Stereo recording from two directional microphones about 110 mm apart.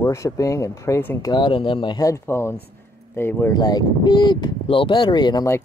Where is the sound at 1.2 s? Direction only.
45° left (ahead or behind).